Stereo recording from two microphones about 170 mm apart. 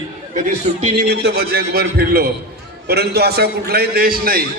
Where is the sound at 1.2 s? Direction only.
70° right (ahead or behind).